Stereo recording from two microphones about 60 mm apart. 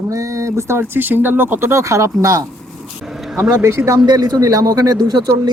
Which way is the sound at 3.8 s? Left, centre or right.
Right.